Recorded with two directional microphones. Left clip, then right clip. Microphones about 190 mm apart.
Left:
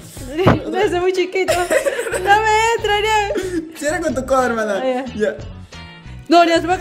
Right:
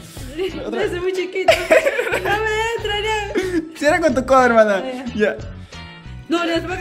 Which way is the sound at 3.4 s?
20° right (ahead or behind).